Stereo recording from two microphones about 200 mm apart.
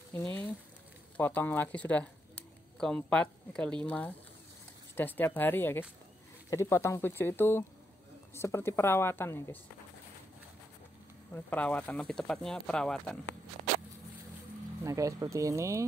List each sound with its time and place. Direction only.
0.1 s frying: 10° left (ahead or behind)
1.1 s speech: 10° left (ahead or behind)
11.3 s speech: 5° left (ahead or behind)
14.8 s speech: 15° right (ahead or behind)